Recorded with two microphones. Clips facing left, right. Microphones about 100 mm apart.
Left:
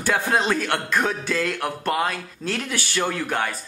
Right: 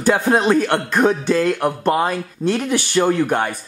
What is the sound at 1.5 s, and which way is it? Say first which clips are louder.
Speech: right 6 dB; 15° right (ahead or behind).